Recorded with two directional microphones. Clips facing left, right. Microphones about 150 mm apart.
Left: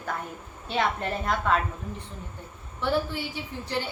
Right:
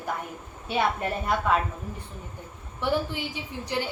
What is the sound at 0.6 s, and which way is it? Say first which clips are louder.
Speech: right 1 dB; 10° right (ahead or behind).